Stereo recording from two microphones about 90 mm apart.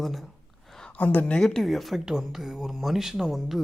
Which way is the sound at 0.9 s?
20° left (ahead or behind).